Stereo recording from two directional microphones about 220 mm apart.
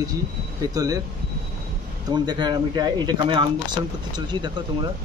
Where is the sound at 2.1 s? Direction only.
20° right (ahead or behind).